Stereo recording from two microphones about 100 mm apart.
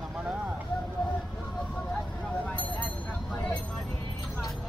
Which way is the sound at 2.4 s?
15° left (ahead or behind).